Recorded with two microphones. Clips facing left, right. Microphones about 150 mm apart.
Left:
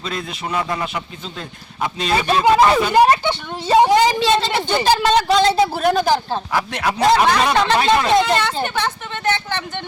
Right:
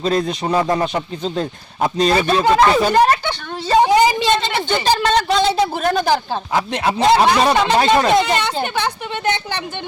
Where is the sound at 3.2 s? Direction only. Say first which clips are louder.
Left 3 dB; 20° left (ahead or behind).